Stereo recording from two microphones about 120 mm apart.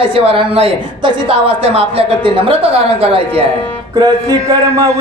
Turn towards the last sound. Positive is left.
turn(degrees=-30)  # may be behind; listen again after turning